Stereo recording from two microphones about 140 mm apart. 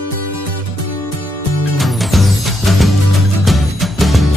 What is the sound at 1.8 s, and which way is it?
Music, centre (ahead or behind).